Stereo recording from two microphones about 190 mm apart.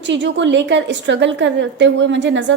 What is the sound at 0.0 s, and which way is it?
A woman's voice, 70° right (ahead or behind).